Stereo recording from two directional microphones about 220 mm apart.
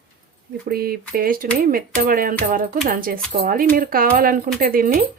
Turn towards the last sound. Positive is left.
turn(degrees=-40)  # may be behind; listen again after turning